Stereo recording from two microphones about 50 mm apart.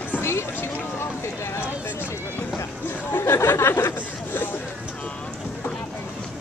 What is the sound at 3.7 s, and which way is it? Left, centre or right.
Chatter, left.